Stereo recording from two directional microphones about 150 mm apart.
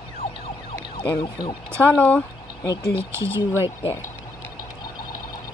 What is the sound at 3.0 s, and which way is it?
Speech, 15° right (ahead or behind).